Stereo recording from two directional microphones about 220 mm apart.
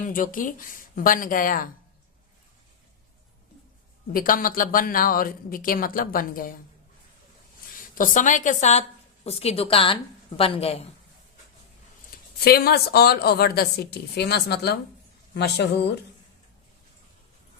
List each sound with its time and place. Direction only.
0.0 s speech: 40° left (ahead or behind)
4.1 s speech: 40° left (ahead or behind)
7.9 s a woman's voice: 35° left (ahead or behind)
12.1 s a sound: 40° left (ahead or behind)
12.5 s a woman's voice: 45° left (ahead or behind)